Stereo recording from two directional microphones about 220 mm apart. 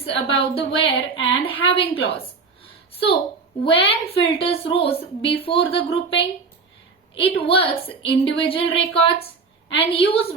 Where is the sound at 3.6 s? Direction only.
25° left (ahead or behind).